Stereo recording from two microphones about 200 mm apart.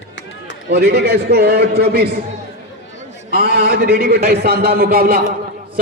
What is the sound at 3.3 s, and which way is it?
A man's voice, 50° right (ahead or behind).